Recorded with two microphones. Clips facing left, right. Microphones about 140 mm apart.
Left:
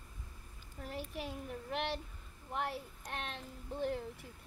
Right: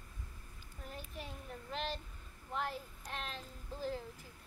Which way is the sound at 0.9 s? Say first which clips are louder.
Left 6 dB; 85° left.